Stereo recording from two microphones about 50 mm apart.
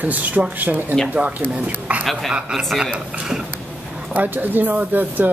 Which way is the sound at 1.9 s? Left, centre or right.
Right.